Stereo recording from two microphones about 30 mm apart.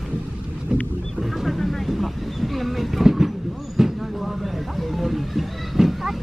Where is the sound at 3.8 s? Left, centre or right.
Centre.